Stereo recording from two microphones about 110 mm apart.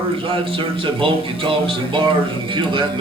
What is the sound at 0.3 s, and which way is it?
Speech, 50° right (ahead or behind).